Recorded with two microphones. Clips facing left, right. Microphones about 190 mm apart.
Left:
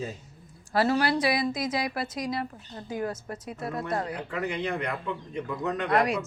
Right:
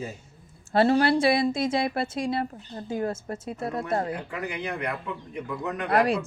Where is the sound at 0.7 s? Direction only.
30° right (ahead or behind).